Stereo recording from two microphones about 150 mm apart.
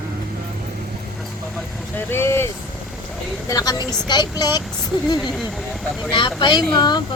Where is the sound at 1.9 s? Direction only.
15° left (ahead or behind).